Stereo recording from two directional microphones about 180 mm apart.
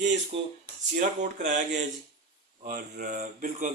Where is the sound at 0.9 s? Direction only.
40° right (ahead or behind).